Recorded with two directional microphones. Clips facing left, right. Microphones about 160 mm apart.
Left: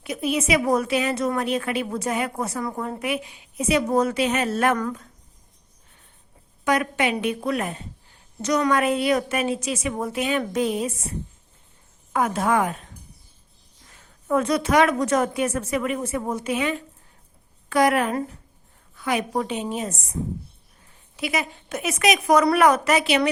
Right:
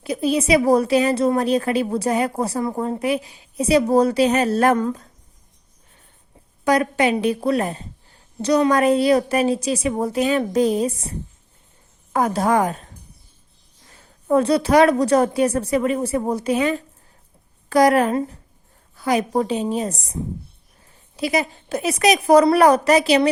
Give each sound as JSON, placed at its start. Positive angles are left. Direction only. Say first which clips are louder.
{"t": 0.0, "sound": "a woman's voice", "louder": "right 4 dB", "side_deg": -35}
{"t": 6.7, "sound": "a woman's voice", "louder": "right 4 dB", "side_deg": -35}
{"t": 12.1, "sound": "a woman's voice", "louder": "right 3 dB", "side_deg": -35}
{"t": 13.9, "sound": "a woman's voice", "louder": "right 5 dB", "side_deg": -35}
{"t": 21.2, "sound": "a woman's voice", "louder": "right 5 dB", "side_deg": -35}